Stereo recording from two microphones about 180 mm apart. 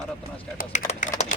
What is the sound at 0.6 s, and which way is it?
Speech, 40° left (ahead or behind).